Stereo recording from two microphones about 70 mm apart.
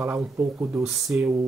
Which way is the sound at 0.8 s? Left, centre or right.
Centre.